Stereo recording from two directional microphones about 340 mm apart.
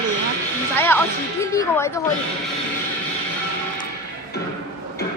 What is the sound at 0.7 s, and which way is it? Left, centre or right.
Speech, centre.